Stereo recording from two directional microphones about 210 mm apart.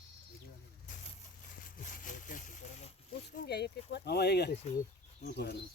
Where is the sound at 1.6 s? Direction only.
40° left (ahead or behind).